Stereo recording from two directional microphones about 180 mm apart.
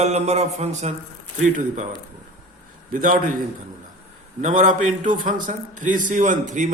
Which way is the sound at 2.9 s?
45° right (ahead or behind).